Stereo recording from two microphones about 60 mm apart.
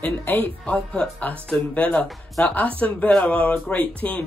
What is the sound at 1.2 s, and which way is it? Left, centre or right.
Speech, left.